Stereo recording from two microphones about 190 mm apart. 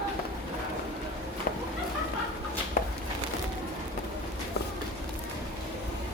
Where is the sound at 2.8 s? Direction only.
50° left (ahead or behind).